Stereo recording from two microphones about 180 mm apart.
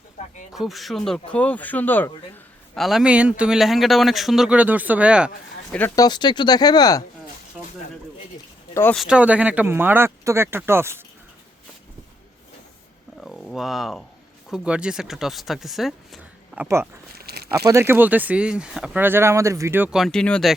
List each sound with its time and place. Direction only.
0.5 s speech: centre (ahead or behind)
2.7 s speech: centre (ahead or behind)
6.0 s speech: 25° left (ahead or behind)
8.7 s speech: 10° left (ahead or behind)
9.0 s speech: 5° right (ahead or behind)
13.2 s a sound: centre (ahead or behind)
14.5 s speech: 5° right (ahead or behind)
16.6 s speech: 15° right (ahead or behind)
17.2 s a sound: 60° right (ahead or behind)
17.7 s speech: 15° right (ahead or behind); by 20.5 s 5° left (ahead or behind)